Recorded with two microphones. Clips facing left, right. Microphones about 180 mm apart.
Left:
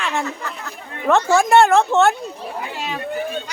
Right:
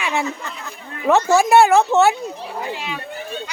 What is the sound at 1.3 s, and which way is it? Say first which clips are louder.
Speech: even; 5° right (ahead or behind).